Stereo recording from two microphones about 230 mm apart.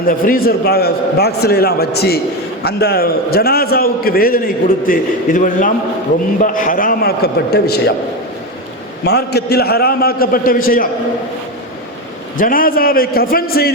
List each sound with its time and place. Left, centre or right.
0.0 s a man's voice: left
9.0 s a man's voice: left
12.4 s a man's voice: left